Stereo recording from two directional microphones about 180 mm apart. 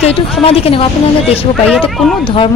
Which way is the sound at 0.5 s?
35° left (ahead or behind).